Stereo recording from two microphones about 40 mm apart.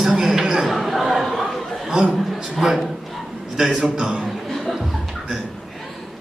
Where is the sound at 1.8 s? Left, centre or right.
Centre.